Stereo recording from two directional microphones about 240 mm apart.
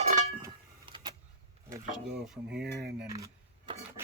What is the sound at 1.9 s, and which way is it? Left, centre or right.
Speech, centre.